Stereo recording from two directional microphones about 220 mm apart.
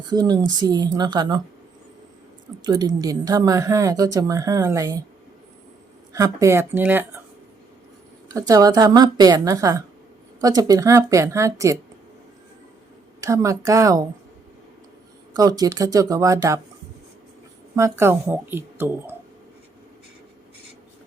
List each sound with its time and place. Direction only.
0.1 s speech: 20° right (ahead or behind)
2.6 s speech: 15° right (ahead or behind)
6.1 s speech: 15° right (ahead or behind)
8.3 s speech: 15° right (ahead or behind)
13.2 s speech: 15° right (ahead or behind)
15.4 s speech: 15° right (ahead or behind)
17.7 s speech: 10° right (ahead or behind)